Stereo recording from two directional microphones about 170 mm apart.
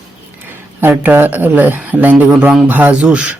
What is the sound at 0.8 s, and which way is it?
Speech, 10° right (ahead or behind).